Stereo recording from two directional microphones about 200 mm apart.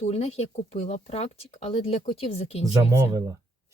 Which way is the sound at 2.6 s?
15° right (ahead or behind).